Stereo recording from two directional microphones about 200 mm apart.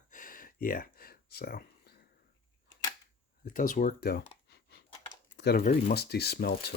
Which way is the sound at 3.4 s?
45° left (ahead or behind).